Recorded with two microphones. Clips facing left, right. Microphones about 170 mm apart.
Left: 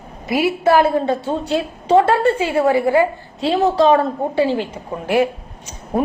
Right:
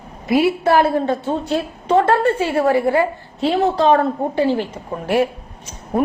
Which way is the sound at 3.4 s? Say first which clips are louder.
Left 1 dB; 35° left (ahead or behind).